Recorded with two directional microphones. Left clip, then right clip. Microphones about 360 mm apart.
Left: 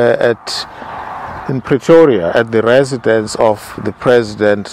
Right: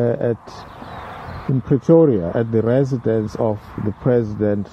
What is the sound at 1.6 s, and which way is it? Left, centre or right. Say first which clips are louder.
Speech: left 6 dB; centre.